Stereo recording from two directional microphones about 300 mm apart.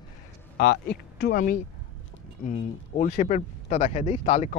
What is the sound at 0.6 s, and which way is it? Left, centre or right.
Speech, left.